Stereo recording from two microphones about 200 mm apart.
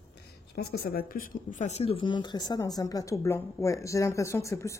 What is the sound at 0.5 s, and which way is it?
Speech, 50° left (ahead or behind).